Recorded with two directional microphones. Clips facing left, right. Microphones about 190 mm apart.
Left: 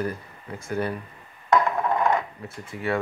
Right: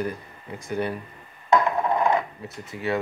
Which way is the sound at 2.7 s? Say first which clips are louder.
Even; 25° right (ahead or behind).